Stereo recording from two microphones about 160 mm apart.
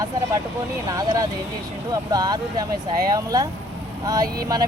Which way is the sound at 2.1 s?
25° right (ahead or behind).